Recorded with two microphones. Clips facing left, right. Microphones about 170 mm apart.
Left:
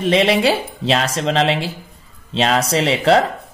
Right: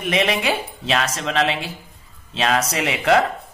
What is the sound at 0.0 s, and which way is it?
Speech, 30° left (ahead or behind).